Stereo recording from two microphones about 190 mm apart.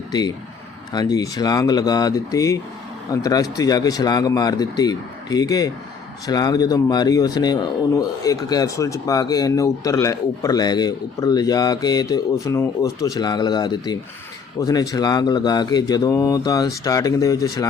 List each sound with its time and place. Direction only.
0.1 s a man's voice: 20° left (ahead or behind)